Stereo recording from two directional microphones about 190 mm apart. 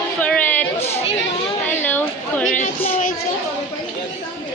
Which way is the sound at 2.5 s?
40° left (ahead or behind).